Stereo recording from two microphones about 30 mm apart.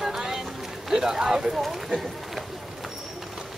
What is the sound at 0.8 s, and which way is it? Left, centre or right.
Speech, centre.